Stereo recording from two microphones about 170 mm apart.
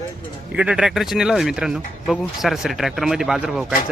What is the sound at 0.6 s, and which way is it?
Speech, 5° right (ahead or behind).